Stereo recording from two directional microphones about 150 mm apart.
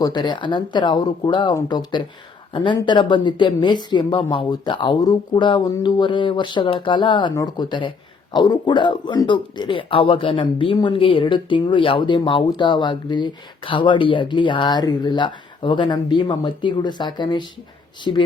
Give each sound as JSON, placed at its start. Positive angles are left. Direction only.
{"t": 0.0, "sound": "speech", "side_deg": 30}